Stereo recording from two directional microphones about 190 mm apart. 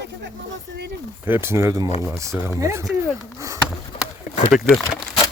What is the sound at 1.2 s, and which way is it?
Speech, 10° right (ahead or behind).